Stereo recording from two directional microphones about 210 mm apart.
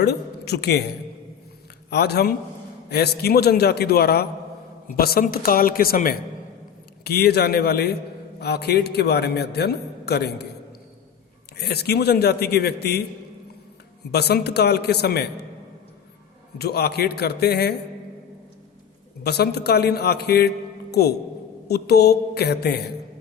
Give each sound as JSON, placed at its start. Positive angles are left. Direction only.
{"t": 0.0, "sound": "a man's voice", "side_deg": 50}
{"t": 1.9, "sound": "a man's voice", "side_deg": 50}
{"t": 11.5, "sound": "a man's voice", "side_deg": 50}
{"t": 14.1, "sound": "a man's voice", "side_deg": 50}
{"t": 16.6, "sound": "a man's voice", "side_deg": 50}
{"t": 19.2, "sound": "a man's voice", "side_deg": 50}